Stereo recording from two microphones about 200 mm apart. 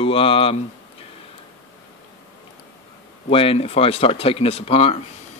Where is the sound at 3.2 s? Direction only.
25° left (ahead or behind).